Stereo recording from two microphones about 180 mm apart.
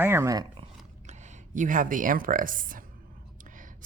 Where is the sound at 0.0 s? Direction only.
15° right (ahead or behind).